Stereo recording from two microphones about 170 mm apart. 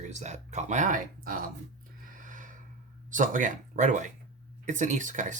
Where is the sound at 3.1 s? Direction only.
50° right (ahead or behind).